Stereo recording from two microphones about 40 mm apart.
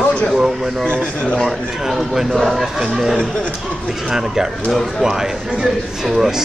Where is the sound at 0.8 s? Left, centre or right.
Left.